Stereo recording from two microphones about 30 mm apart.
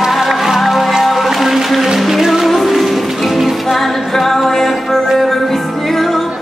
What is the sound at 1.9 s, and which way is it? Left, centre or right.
Music, centre.